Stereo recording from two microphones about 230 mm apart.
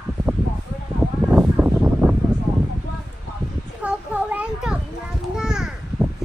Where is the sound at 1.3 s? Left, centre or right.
Centre.